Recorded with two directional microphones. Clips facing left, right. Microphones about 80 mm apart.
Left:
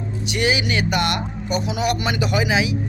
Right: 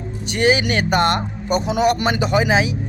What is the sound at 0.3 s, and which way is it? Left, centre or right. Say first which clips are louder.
A man's voice: right 4 dB; right.